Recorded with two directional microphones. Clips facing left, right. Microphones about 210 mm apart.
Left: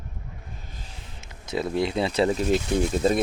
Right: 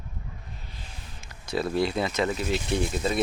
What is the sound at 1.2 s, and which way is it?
Speech, 20° left (ahead or behind).